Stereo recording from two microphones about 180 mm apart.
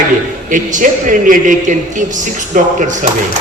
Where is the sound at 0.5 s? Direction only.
45° right (ahead or behind).